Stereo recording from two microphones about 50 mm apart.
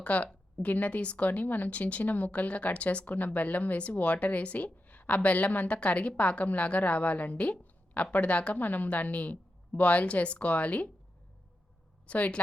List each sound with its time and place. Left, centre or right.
0.0 s speech: left
12.0 s speech: left